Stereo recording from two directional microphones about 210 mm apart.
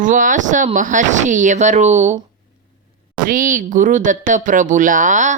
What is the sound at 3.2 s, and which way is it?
Speech, 40° right (ahead or behind).